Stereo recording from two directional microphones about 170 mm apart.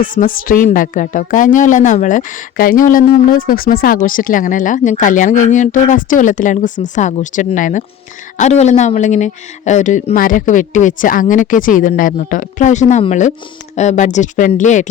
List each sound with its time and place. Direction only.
0.0 s speech: 55° left (ahead or behind)